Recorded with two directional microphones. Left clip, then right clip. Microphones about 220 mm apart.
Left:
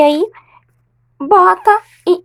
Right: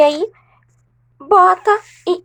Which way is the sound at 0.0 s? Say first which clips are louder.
Left 2 dB; 30° left (ahead or behind).